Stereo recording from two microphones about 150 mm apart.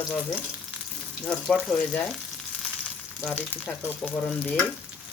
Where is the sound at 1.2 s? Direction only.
5° left (ahead or behind).